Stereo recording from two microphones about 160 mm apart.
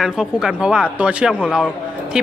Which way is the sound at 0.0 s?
5° right (ahead or behind).